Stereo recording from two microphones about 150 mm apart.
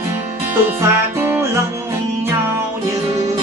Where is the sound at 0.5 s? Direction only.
15° right (ahead or behind).